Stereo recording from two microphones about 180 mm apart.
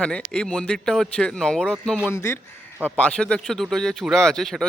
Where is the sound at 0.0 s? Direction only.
5° left (ahead or behind).